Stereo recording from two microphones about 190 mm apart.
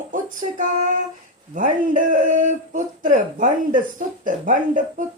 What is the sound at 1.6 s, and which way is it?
Speech, 40° right (ahead or behind).